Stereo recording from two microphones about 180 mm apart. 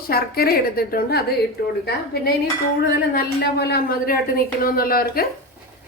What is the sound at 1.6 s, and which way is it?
Speech, 70° left (ahead or behind).